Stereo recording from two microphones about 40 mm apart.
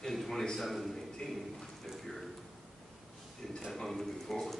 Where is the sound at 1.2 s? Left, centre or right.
Centre.